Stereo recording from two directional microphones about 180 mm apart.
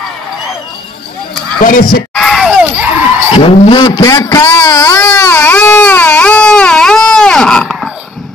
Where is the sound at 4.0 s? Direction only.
20° left (ahead or behind).